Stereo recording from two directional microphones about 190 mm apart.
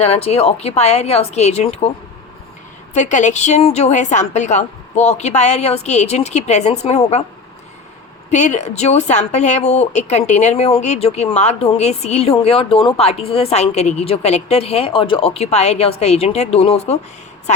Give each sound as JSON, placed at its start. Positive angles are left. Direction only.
{"t": 0.0, "sound": "speech", "side_deg": 30}
{"t": 2.9, "sound": "speech", "side_deg": 40}
{"t": 8.3, "sound": "speech", "side_deg": 40}